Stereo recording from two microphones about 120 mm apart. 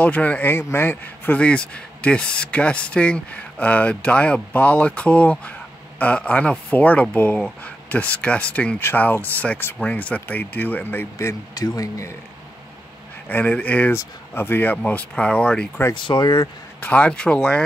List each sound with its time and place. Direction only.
0.0 s speech: 10° left (ahead or behind); by 12.1 s 30° left (ahead or behind)
13.3 s speech: 10° left (ahead or behind)
15.9 s speech: 40° left (ahead or behind)
16.8 s speech: 10° left (ahead or behind)